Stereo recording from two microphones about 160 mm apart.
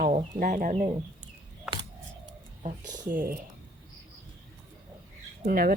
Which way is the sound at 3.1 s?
60° right (ahead or behind).